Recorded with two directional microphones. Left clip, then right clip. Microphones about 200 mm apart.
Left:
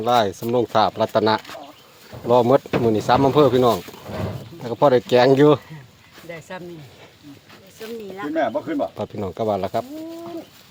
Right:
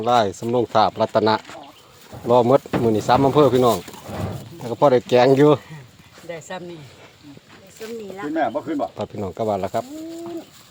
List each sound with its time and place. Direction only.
0.0 s speech: centre (ahead or behind)
6.2 s a sound: 40° right (ahead or behind)
7.8 s speech: 5° right (ahead or behind)
8.4 s speech: 45° left (ahead or behind)
9.0 s speech: 5° left (ahead or behind)